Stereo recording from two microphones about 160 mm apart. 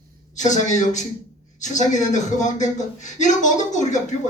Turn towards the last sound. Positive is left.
turn(degrees=50)  # may be behind; listen again after turning